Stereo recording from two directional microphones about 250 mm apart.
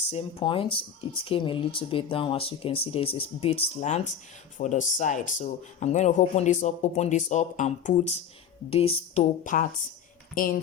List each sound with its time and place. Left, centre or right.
0.1 s speech: left